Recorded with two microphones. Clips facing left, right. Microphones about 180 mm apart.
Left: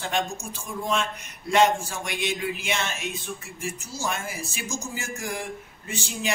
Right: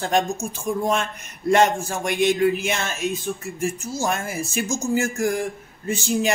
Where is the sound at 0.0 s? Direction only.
45° right (ahead or behind).